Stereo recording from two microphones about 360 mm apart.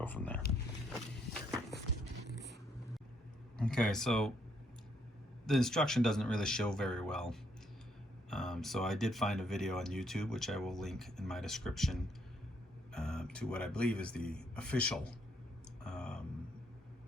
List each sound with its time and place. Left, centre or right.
0.0 s speech: centre
2.2 s vehicle: left
3.6 s speech: centre
5.5 s speech: centre
15.8 s a sound: centre